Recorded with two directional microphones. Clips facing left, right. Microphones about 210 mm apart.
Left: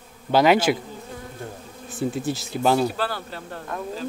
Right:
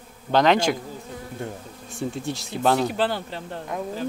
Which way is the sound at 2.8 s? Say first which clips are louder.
Right 2 dB; 20° right (ahead or behind).